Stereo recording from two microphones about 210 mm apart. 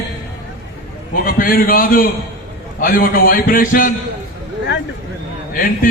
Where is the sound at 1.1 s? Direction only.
45° left (ahead or behind).